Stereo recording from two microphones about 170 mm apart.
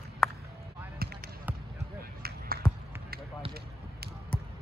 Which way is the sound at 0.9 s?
65° right (ahead or behind).